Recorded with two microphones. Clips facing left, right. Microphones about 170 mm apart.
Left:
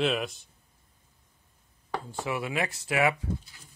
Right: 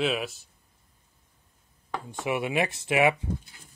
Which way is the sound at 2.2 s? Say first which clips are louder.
Right 4 dB; 20° right (ahead or behind).